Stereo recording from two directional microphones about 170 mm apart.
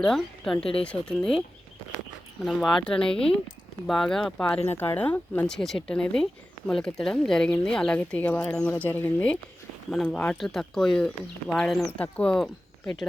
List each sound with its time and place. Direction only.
0.0 s speech: 5° left (ahead or behind)
0.6 s speech: 35° left (ahead or behind)
0.9 s speech: 5° left (ahead or behind)